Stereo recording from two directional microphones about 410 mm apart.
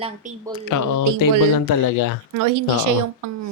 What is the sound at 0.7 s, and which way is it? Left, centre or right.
Speech, left.